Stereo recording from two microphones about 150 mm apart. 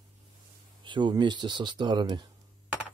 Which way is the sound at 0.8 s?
30° right (ahead or behind).